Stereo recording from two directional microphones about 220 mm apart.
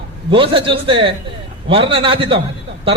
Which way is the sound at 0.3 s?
25° right (ahead or behind).